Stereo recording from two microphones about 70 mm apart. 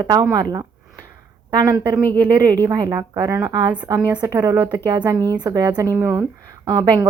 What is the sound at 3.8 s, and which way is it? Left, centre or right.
Speech, right.